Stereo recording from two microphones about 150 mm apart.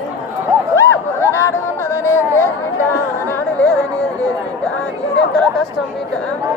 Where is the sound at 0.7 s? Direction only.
20° left (ahead or behind).